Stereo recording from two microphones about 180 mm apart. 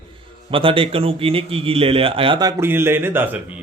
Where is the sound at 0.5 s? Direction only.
30° right (ahead or behind).